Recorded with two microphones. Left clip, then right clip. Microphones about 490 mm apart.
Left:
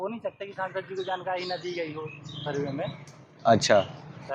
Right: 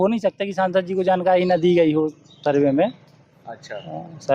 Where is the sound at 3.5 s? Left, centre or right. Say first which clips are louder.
Left 14 dB; left.